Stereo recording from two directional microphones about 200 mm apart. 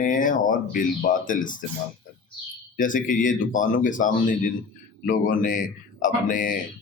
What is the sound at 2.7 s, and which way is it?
Speech, 40° left (ahead or behind).